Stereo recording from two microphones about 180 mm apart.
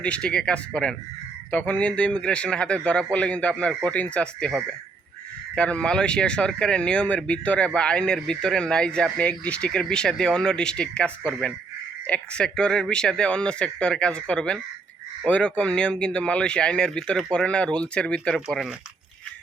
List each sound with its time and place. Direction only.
0.0 s speech: 5° left (ahead or behind)